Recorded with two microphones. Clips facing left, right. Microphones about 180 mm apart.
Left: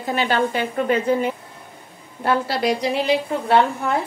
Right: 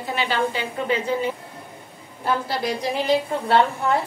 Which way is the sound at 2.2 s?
75° left (ahead or behind).